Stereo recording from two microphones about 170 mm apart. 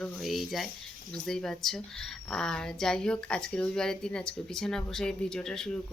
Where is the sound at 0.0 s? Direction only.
Centre (ahead or behind).